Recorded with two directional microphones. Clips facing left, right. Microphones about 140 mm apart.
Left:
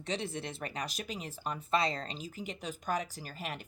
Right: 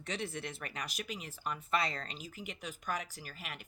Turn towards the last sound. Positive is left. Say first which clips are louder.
# left 6 dB
turn(degrees=35)  # may be behind; listen again after turning